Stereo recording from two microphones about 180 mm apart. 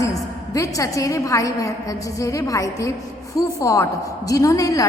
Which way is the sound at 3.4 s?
15° left (ahead or behind).